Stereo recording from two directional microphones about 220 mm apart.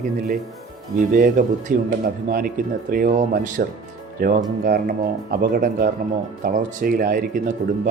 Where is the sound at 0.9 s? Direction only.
40° right (ahead or behind).